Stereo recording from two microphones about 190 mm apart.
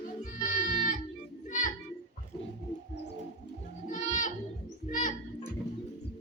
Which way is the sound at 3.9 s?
45° left (ahead or behind).